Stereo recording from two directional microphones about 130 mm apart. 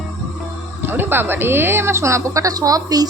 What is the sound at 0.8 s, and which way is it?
Speech, 15° right (ahead or behind).